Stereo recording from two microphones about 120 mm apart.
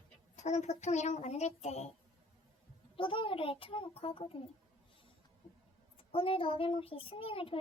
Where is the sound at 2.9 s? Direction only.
45° left (ahead or behind).